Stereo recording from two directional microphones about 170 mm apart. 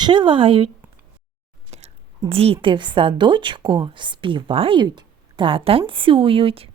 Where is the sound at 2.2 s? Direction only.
35° right (ahead or behind).